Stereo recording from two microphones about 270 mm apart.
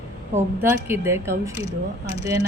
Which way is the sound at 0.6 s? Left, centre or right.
Centre.